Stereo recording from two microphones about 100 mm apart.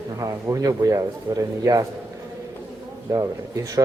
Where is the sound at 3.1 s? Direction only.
35° right (ahead or behind).